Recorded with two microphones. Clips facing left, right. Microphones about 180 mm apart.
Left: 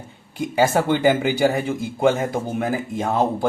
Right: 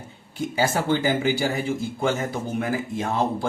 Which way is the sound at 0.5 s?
55° left (ahead or behind).